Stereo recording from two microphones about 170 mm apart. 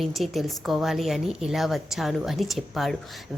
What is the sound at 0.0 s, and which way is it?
A woman's voice, centre (ahead or behind).